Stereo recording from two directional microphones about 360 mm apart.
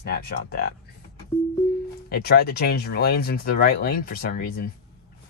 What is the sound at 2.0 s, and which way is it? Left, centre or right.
Speech, left.